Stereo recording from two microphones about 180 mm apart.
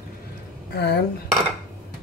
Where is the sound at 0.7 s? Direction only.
65° left (ahead or behind).